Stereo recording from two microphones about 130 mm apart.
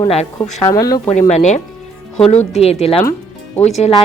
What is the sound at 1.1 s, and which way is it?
Speech, 65° left (ahead or behind).